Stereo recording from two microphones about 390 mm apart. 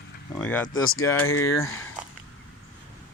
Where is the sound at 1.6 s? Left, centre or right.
Left.